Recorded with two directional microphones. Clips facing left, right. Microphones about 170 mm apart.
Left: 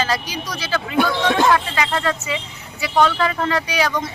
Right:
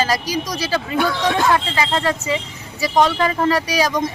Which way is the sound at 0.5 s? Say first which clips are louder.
Left 3 dB; 35° right (ahead or behind).